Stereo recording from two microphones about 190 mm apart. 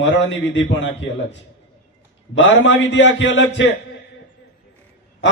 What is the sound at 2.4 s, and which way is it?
A man's voice, 70° left (ahead or behind).